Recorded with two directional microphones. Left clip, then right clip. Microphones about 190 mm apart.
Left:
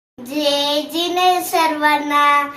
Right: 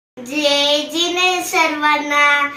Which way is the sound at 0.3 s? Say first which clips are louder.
Right 3 dB; 5° left (ahead or behind).